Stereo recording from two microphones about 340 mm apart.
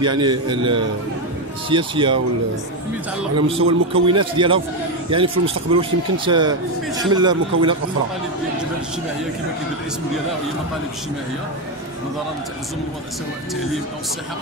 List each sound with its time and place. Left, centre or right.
0.0 s a man's voice: centre
3.4 s a man's voice: centre